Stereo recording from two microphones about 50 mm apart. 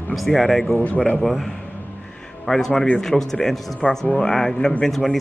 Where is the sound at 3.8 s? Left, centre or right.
Left.